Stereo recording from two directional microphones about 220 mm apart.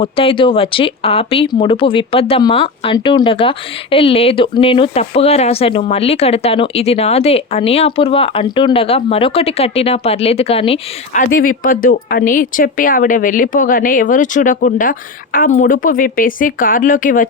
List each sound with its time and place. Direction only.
0.0 s speech: 25° left (ahead or behind)
11.3 s speech: 40° left (ahead or behind)